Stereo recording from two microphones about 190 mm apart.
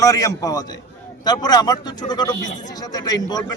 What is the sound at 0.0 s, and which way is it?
A man's voice, 20° left (ahead or behind).